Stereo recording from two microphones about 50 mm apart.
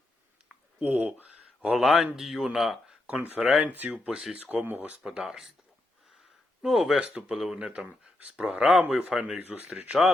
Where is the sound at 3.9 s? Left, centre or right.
Centre.